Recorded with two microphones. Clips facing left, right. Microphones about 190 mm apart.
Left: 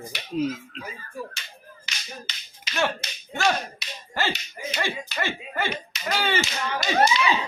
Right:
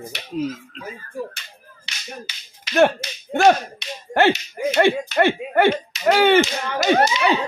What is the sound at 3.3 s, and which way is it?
Speech, 55° right (ahead or behind).